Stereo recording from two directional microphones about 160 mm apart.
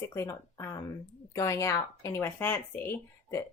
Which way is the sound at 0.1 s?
20° left (ahead or behind).